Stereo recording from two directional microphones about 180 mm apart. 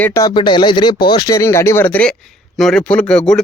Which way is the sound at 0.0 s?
15° left (ahead or behind).